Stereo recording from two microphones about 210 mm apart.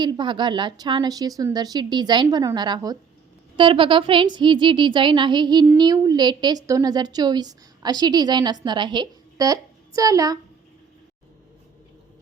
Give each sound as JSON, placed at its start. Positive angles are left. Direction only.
{"t": 0.0, "sound": "a woman's voice", "side_deg": -20}